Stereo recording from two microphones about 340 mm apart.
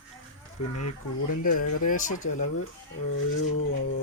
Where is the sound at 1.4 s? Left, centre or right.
Left.